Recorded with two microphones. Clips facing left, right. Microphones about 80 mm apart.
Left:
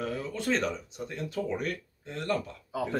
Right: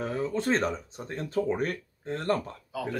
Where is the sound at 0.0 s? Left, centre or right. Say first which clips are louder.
Right 4 dB; right.